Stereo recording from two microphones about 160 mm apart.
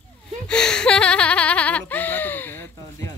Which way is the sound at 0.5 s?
5° left (ahead or behind).